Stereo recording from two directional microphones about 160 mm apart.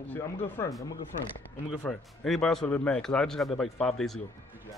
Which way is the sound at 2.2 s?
5° left (ahead or behind).